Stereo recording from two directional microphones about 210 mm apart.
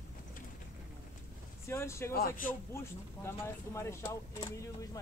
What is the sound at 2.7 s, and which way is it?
Speech, 10° left (ahead or behind).